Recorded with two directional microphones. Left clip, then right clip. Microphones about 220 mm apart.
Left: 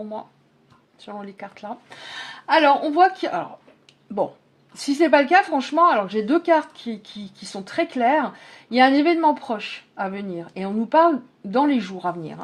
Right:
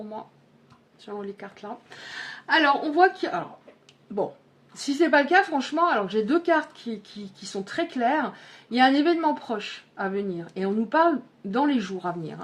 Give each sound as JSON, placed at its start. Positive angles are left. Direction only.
{"t": 1.0, "sound": "speech", "side_deg": 30}
{"t": 4.9, "sound": "speech", "side_deg": 25}